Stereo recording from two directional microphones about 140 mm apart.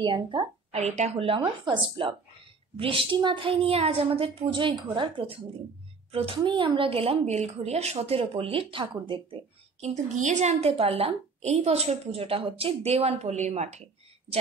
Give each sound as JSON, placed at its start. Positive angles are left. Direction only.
{"t": 0.0, "sound": "a woman's voice", "side_deg": -35}
{"t": 0.7, "sound": "a woman's voice", "side_deg": -55}
{"t": 9.8, "sound": "a woman's voice", "side_deg": -55}